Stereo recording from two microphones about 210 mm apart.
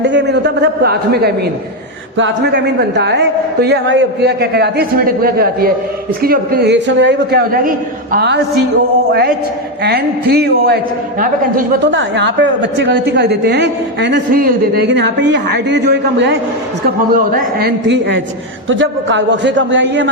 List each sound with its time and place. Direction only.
0.0 s a man's voice: 55° right (ahead or behind)
9.8 s a man's voice: 50° right (ahead or behind)
11.9 s a woman's voice: 60° right (ahead or behind)